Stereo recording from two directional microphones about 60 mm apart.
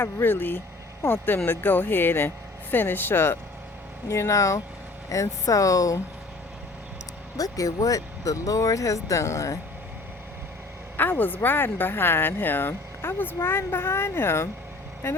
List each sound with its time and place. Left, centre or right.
0.0 s speech: left
4.1 s speech: left
7.3 s speech: left
10.9 s speech: left